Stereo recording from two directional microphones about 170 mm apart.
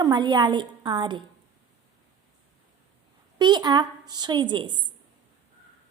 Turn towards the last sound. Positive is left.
turn(degrees=-30)  # may be behind; listen again after turning